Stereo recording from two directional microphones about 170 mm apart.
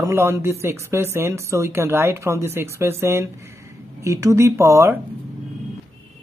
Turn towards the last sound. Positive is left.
turn(degrees=-15)  # may be behind; listen again after turning